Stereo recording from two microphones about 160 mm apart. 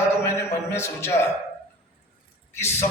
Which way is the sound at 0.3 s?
15° left (ahead or behind).